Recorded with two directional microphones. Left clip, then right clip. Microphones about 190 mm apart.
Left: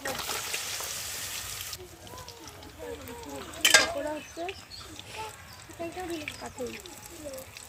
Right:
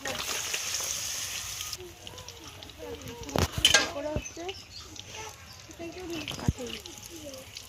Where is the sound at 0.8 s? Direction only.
25° left (ahead or behind).